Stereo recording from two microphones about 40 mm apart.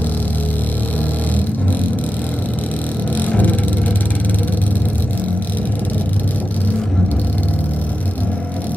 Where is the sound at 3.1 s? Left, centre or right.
Left.